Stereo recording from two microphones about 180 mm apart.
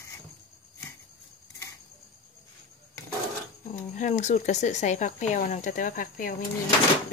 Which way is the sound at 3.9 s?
40° left (ahead or behind).